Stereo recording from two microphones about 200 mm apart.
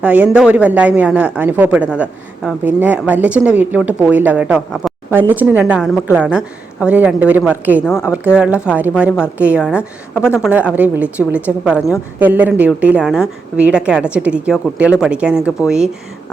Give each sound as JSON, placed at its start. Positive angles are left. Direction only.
{"t": 0.0, "sound": "a woman's voice", "side_deg": -5}
{"t": 7.9, "sound": "a woman's voice", "side_deg": 10}
{"t": 8.4, "sound": "a woman's voice", "side_deg": -5}